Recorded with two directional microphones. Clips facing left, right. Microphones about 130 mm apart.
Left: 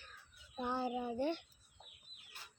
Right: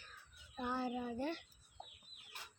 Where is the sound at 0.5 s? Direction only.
20° left (ahead or behind).